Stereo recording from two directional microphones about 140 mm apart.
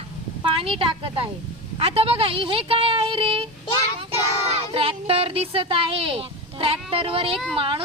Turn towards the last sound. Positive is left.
turn(degrees=-40)  # may be behind; listen again after turning